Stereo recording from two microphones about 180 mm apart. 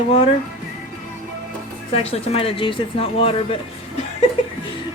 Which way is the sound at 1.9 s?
35° left (ahead or behind).